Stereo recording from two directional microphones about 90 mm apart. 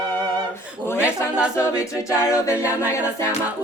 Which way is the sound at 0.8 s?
30° left (ahead or behind).